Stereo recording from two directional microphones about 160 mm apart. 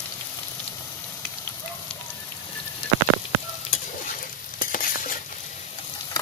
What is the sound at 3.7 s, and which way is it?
Stir, 55° left (ahead or behind).